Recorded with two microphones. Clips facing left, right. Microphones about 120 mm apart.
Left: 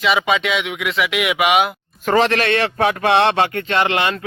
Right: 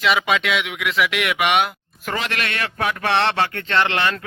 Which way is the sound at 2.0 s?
40° left (ahead or behind).